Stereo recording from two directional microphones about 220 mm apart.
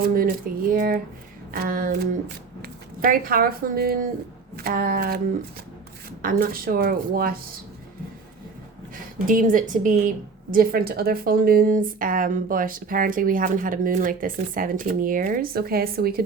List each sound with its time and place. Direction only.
0.0 s speech: 40° right (ahead or behind)
6.2 s speech: 40° right (ahead or behind)
9.2 s speech: 40° right (ahead or behind)